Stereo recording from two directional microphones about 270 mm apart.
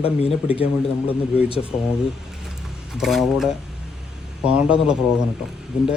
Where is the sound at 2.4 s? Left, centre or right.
Centre.